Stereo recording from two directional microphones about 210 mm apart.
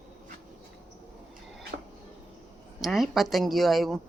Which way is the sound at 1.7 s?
45° right (ahead or behind).